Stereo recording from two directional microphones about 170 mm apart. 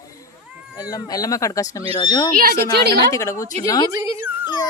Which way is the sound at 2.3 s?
65° right (ahead or behind).